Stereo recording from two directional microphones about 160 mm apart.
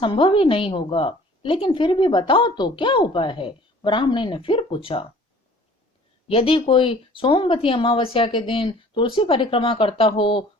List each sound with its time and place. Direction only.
0.0 s a woman's voice: 30° left (ahead or behind)
6.2 s a woman's voice: 35° left (ahead or behind)